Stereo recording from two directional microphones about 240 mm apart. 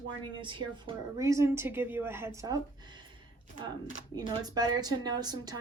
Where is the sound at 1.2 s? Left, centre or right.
Centre.